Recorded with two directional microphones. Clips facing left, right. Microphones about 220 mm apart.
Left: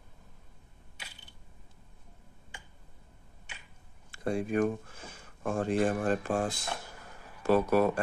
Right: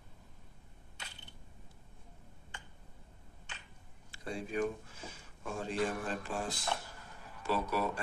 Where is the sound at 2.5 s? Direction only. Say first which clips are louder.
Even; 10° left (ahead or behind).